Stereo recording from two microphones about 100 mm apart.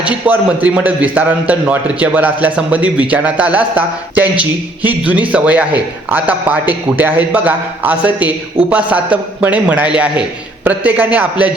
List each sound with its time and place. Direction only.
0.3 s a man's voice: 15° right (ahead or behind)